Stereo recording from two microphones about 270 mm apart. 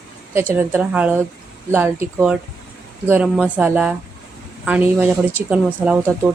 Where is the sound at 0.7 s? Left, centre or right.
Centre.